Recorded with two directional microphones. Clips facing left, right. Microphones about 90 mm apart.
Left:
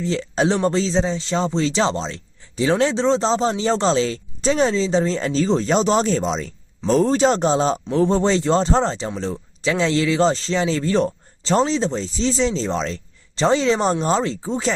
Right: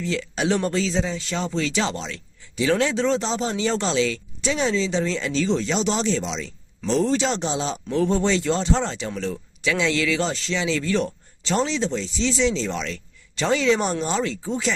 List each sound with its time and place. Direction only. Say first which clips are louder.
0.0 s speech: left 5 dB; 35° left (ahead or behind)